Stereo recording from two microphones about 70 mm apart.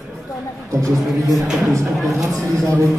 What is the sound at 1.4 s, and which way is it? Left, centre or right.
Speech, centre.